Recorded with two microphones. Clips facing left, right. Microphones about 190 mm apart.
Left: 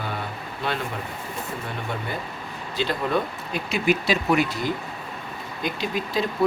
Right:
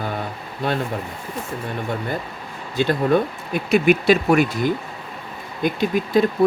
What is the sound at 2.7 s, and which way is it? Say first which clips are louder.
Speech: right 6 dB; 50° right (ahead or behind).